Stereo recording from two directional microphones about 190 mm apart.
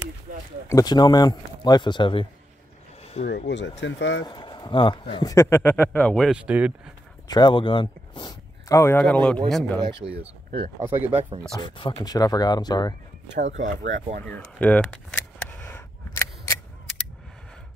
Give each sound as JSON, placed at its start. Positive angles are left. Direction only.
{"t": 0.3, "sound": "speech", "side_deg": -45}
{"t": 0.7, "sound": "speech", "side_deg": 20}
{"t": 3.3, "sound": "speech", "side_deg": 65}
{"t": 4.3, "sound": "speech", "side_deg": 20}
{"t": 7.2, "sound": "speech", "side_deg": 25}
{"t": 9.8, "sound": "speech", "side_deg": -25}
{"t": 10.8, "sound": "speech", "side_deg": -10}
{"t": 11.5, "sound": "speech", "side_deg": 25}
{"t": 13.7, "sound": "speech", "side_deg": -40}
{"t": 14.2, "sound": "a sound", "side_deg": 5}